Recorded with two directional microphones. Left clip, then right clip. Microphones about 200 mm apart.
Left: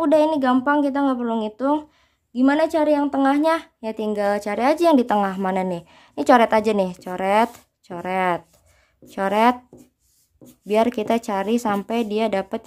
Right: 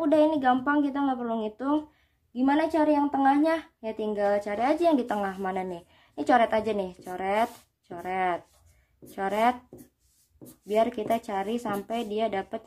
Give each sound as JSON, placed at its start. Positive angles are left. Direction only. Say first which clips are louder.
{"t": 0.0, "sound": "a woman's voice", "louder": "left 5 dB", "side_deg": 30}
{"t": 10.7, "sound": "a woman's voice", "louder": "left 6 dB", "side_deg": 40}